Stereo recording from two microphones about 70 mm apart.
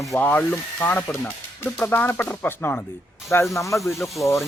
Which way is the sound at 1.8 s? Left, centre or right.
Left.